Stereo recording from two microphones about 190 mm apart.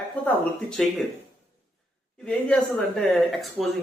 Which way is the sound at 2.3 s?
5° left (ahead or behind).